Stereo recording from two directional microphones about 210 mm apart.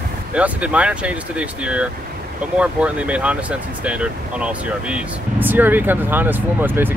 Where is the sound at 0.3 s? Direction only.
5° right (ahead or behind).